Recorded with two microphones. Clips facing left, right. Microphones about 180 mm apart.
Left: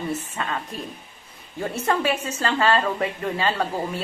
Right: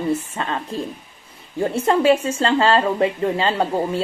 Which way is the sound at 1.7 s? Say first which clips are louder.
Right 7 dB; 25° right (ahead or behind).